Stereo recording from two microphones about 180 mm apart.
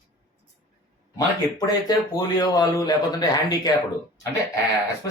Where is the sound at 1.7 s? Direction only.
20° left (ahead or behind).